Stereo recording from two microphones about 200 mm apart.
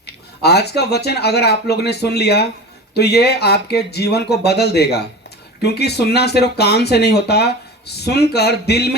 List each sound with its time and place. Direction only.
0.0 s speech: 55° left (ahead or behind)